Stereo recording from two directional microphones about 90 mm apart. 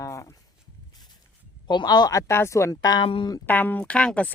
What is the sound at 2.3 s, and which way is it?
Speech, 30° left (ahead or behind).